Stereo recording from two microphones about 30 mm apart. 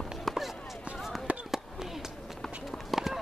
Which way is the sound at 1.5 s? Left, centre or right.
Centre.